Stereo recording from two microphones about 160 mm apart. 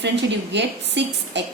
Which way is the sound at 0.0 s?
90° right.